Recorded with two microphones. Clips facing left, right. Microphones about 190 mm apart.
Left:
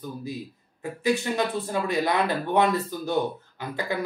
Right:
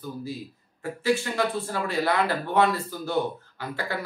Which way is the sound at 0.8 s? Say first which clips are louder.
Even; 15° left (ahead or behind).